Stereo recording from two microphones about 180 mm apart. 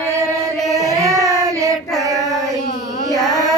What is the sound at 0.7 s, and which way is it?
Child singing, 20° right (ahead or behind).